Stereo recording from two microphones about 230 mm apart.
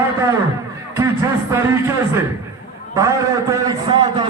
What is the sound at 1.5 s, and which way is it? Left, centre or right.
A man's voice, centre.